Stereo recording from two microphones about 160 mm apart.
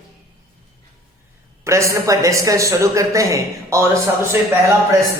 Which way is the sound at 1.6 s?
20° right (ahead or behind).